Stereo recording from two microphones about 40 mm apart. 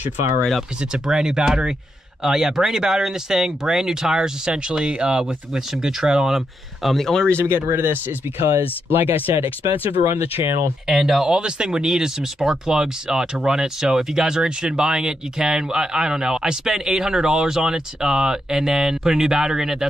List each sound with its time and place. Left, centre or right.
0.9 s speech: centre
6.9 s speech: centre
7.3 s speech: right
10.9 s speech: centre
11.2 s speech: right